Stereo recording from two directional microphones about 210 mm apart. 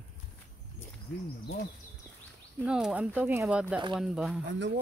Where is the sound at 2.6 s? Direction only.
5° right (ahead or behind).